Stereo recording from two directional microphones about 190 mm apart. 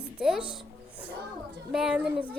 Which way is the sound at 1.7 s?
5° right (ahead or behind).